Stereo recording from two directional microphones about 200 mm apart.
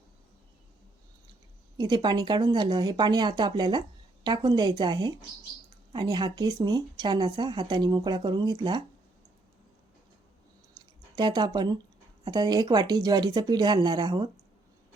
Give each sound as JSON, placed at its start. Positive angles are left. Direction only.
{"t": 1.8, "sound": "speech", "side_deg": -20}
{"t": 10.8, "sound": "a sound", "side_deg": -20}
{"t": 12.2, "sound": "speech", "side_deg": -20}